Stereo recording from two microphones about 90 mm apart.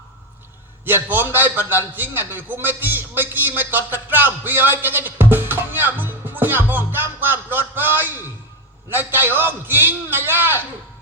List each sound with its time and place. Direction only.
0.9 s a man's voice: 25° right (ahead or behind)